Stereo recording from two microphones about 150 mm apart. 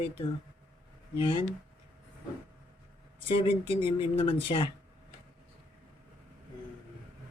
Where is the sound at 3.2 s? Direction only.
35° left (ahead or behind).